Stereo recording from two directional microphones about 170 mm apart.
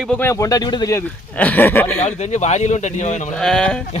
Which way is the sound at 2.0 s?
45° left (ahead or behind).